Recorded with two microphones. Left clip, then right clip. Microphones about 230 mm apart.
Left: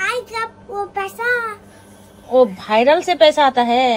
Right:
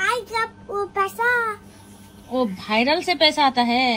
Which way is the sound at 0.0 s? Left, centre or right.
Centre.